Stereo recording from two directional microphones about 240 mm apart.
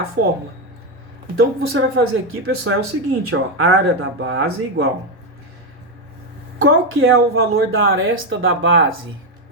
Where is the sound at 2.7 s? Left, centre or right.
Right.